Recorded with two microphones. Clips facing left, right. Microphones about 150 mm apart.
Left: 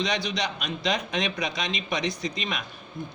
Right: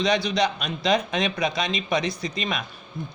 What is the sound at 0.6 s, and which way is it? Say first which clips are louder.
Speech: right 5 dB; 40° right (ahead or behind).